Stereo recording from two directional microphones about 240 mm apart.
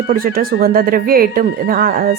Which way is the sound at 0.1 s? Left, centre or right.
Right.